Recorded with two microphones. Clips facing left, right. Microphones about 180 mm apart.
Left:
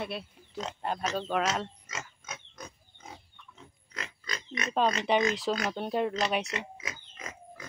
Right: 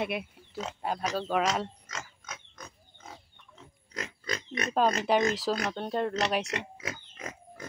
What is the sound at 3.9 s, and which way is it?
Pig, 40° right (ahead or behind).